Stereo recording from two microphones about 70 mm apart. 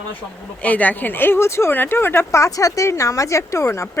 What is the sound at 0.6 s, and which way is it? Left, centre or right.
Speech, left.